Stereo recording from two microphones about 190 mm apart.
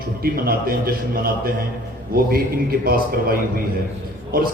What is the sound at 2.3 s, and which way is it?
A man's voice, 50° right (ahead or behind).